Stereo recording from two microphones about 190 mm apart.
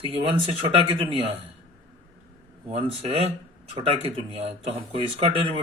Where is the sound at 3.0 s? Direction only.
30° right (ahead or behind).